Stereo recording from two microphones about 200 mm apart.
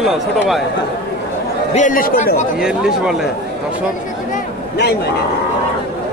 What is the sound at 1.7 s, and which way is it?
Speech, 40° left (ahead or behind).